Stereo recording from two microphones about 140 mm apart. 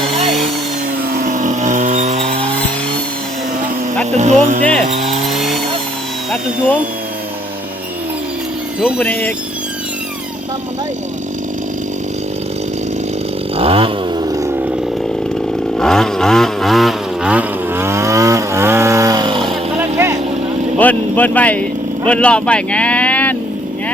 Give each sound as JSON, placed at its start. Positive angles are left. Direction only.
{"t": 1.1, "sound": "vehicle", "side_deg": -70}
{"t": 4.1, "sound": "music", "side_deg": -55}
{"t": 9.0, "sound": "speech", "side_deg": 15}
{"t": 13.6, "sound": "chainsaw", "side_deg": -40}
{"t": 14.3, "sound": "a sound", "side_deg": -25}
{"t": 15.8, "sound": "vehicle", "side_deg": 5}
{"t": 20.7, "sound": "vehicle", "side_deg": 10}